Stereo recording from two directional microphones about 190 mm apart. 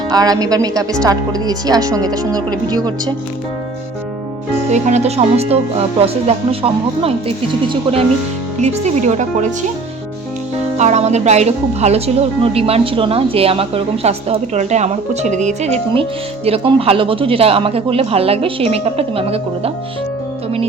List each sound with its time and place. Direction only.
0.1 s speech: 20° right (ahead or behind)
4.7 s speech: 35° right (ahead or behind)
10.8 s speech: 35° right (ahead or behind)